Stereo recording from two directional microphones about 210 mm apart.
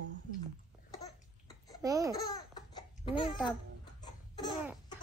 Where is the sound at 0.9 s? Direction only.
15° left (ahead or behind).